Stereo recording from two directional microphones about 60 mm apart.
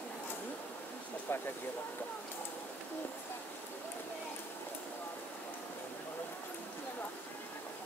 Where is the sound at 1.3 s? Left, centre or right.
Left.